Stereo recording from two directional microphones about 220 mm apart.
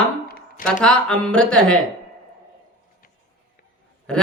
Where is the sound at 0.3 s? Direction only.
45° left (ahead or behind).